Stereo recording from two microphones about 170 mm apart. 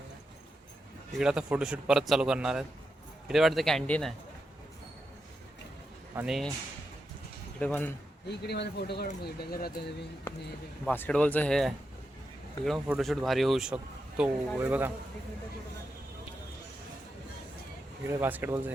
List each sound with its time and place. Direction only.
1.2 s speech: 5° right (ahead or behind)
6.2 s speech: centre (ahead or behind)
7.6 s speech: 10° left (ahead or behind)
8.3 s speech: 80° left
9.2 s speech: 65° left (ahead or behind)
10.8 s speech: 10° left (ahead or behind); by 14.9 s 10° right (ahead or behind)
18.2 s speech: 10° right (ahead or behind)